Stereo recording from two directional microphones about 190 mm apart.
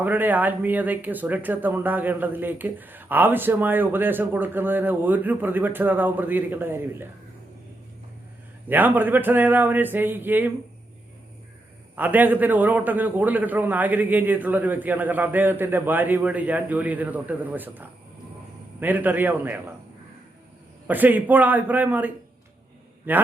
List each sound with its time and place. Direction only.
0.0 s speech: 10° right (ahead or behind)
8.6 s speech: 10° right (ahead or behind)
11.9 s speech: 10° right (ahead or behind)
20.8 s speech: 10° right (ahead or behind)